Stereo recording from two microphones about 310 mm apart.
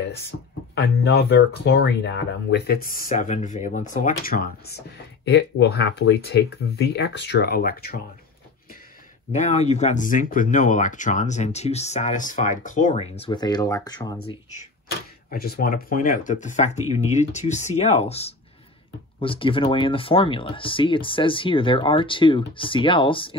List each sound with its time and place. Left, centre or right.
0.7 s speech: left
9.3 s speech: left
15.2 s speech: left